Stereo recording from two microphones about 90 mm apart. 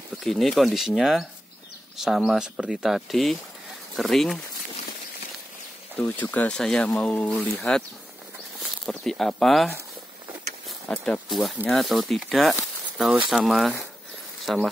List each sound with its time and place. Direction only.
0.2 s speech: 5° left (ahead or behind)
5.9 s speech: 15° left (ahead or behind)
6.5 s speech: 10° left (ahead or behind)
8.5 s speech: 5° left (ahead or behind)
10.9 s speech: centre (ahead or behind)